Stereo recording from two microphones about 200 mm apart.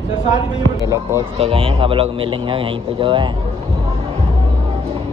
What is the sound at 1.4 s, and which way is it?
A man's voice, 25° right (ahead or behind).